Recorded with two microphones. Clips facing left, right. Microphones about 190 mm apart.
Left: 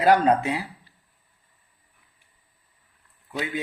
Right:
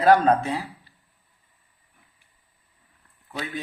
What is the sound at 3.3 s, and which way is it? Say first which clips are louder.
Speech: left 3 dB; 15° left (ahead or behind).